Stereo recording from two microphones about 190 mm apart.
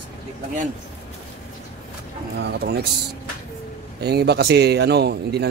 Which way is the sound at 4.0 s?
60° right (ahead or behind).